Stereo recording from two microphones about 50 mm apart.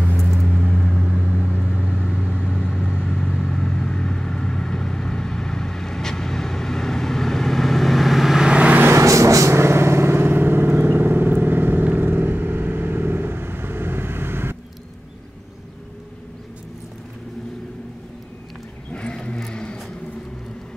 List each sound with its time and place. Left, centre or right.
0.2 s vehicle: centre
1.0 s vehicle: centre
1.3 s vehicle: right
2.2 s vehicle: left; by 8.4 s centre
8.4 s vehicle: right
8.9 s vehicle: right
18.9 s vehicle: left